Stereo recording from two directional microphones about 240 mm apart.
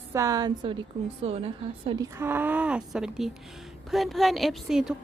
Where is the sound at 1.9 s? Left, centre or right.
Centre.